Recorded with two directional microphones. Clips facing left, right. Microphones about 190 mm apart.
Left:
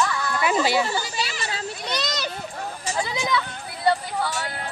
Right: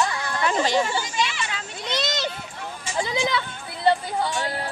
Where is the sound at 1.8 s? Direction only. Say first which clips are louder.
Right 3 dB; 25° right (ahead or behind).